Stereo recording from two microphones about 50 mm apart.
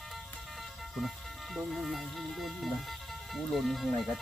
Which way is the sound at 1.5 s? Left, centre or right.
Centre.